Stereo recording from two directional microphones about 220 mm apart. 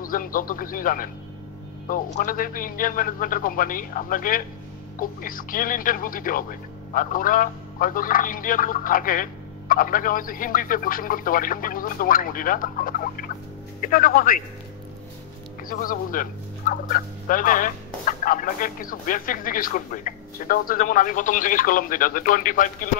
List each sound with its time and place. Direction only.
0.0 s fowl: 40° left (ahead or behind)
15.7 s fowl: 40° left (ahead or behind)